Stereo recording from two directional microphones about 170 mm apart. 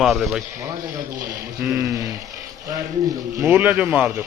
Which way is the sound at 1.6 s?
15° right (ahead or behind).